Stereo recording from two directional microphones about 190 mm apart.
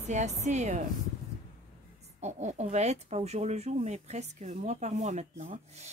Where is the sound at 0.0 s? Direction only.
35° right (ahead or behind).